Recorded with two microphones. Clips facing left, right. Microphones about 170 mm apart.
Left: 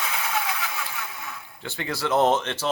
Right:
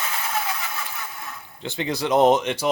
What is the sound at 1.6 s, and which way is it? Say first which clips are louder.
Speech: right 4 dB; 20° right (ahead or behind).